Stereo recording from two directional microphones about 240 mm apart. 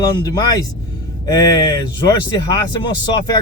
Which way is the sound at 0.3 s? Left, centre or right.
Centre.